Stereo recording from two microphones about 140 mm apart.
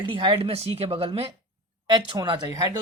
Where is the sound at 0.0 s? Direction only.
40° right (ahead or behind).